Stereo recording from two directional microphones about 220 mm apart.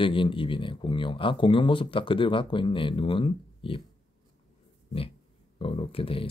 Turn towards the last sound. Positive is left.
turn(degrees=25)  # may be behind; listen again after turning